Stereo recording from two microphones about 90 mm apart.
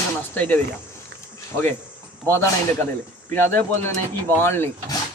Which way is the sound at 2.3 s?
30° left (ahead or behind).